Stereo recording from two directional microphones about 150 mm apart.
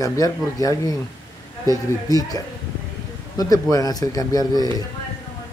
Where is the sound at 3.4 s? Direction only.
25° left (ahead or behind).